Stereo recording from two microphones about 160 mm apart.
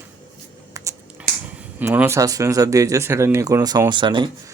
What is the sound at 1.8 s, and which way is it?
Speech, 15° right (ahead or behind).